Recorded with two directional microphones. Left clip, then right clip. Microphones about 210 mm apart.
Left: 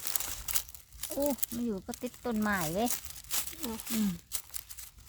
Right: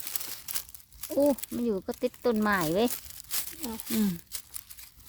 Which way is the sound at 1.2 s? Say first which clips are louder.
Right 7 dB; 50° right (ahead or behind).